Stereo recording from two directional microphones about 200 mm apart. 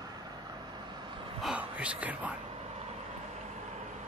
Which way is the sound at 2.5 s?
30° right (ahead or behind).